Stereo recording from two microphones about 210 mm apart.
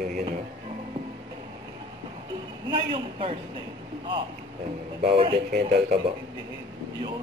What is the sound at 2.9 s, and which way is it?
Speech, 25° right (ahead or behind).